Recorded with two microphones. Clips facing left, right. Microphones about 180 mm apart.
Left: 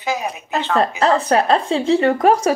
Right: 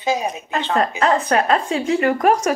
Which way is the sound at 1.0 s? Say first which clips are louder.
Left 2 dB; 35° left (ahead or behind).